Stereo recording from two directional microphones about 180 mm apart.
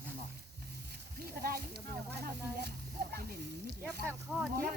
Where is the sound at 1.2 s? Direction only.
60° right (ahead or behind).